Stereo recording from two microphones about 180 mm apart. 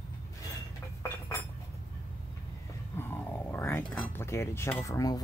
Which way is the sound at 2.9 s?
10° left (ahead or behind).